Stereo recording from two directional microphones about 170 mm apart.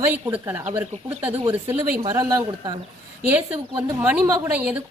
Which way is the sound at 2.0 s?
20° right (ahead or behind).